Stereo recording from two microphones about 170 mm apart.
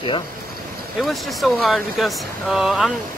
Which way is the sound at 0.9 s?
Centre (ahead or behind).